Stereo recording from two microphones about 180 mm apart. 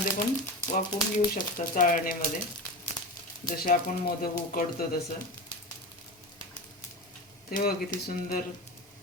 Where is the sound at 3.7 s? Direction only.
55° left (ahead or behind).